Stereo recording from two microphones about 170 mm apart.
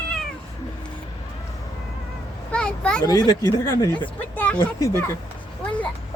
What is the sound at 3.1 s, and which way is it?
Speech, 20° left (ahead or behind).